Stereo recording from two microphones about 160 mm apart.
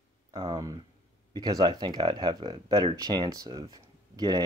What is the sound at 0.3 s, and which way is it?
Speech, 25° right (ahead or behind).